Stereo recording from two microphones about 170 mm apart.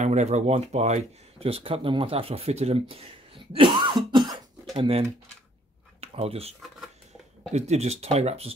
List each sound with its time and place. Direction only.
0.0 s speech: 45° right (ahead or behind)
3.5 s cough: 30° right (ahead or behind)
4.7 s speech: 35° right (ahead or behind)
5.9 s a sound: 35° right (ahead or behind)
7.5 s speech: 40° right (ahead or behind)